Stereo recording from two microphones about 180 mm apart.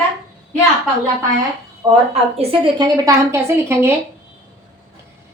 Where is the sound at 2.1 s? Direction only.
30° right (ahead or behind); by 3.9 s 15° right (ahead or behind).